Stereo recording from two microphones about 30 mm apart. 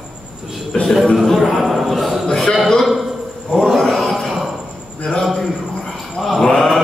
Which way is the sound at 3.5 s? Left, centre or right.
Centre.